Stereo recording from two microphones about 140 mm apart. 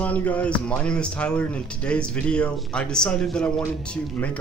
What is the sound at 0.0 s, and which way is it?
A man's voice, 10° left (ahead or behind).